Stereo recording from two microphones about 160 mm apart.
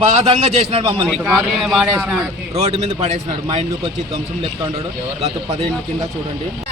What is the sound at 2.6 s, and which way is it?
Speech, 45° right (ahead or behind).